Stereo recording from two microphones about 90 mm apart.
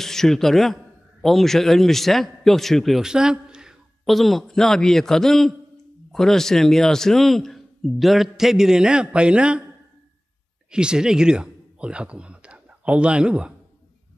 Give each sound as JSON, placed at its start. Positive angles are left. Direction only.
{"t": 0.0, "sound": "a man's voice", "side_deg": 5}
{"t": 10.7, "sound": "a man's voice", "side_deg": -10}